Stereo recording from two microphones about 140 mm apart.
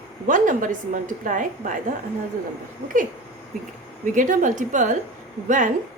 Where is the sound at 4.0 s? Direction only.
65° right (ahead or behind).